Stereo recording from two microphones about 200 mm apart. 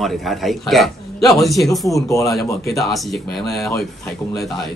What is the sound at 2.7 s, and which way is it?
Speech, centre (ahead or behind).